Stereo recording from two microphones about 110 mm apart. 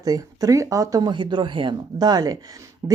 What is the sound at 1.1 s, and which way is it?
Speech, 45° right (ahead or behind).